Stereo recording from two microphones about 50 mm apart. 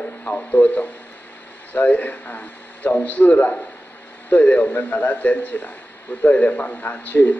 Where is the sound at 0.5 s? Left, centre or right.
Left.